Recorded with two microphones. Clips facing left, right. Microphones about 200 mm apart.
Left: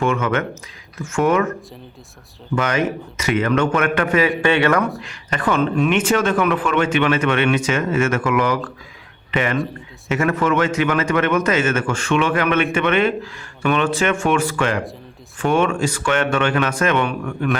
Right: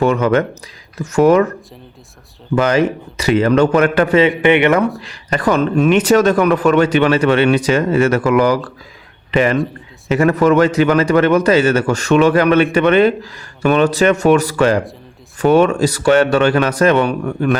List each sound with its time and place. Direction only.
0.0 s speech: 35° right (ahead or behind)
2.6 s speech: 35° right (ahead or behind)
4.9 s speech: 35° right (ahead or behind)